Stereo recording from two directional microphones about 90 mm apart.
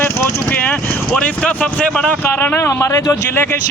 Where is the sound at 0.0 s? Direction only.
20° left (ahead or behind).